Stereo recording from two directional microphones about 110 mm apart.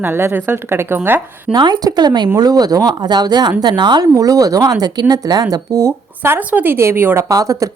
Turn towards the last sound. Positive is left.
turn(degrees=-30)  # may be behind; listen again after turning